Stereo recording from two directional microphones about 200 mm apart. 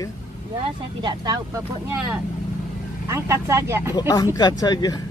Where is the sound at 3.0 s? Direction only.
15° right (ahead or behind).